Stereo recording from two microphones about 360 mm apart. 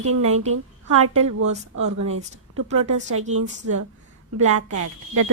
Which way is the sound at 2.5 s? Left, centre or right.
Right.